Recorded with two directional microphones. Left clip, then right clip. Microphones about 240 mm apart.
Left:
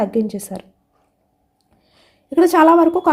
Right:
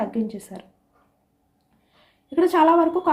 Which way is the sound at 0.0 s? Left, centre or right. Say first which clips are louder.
Left 8 dB; left.